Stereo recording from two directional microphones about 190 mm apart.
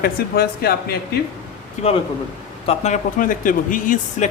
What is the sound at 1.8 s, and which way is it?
Speech, 40° left (ahead or behind).